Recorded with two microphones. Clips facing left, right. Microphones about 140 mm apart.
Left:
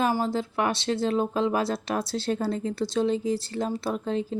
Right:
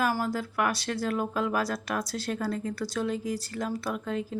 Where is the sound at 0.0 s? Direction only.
25° left (ahead or behind).